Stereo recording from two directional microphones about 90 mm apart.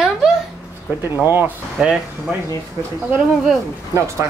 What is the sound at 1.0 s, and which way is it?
Speech, 25° right (ahead or behind).